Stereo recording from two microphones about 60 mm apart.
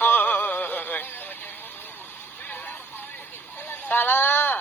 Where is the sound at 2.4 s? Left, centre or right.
Left.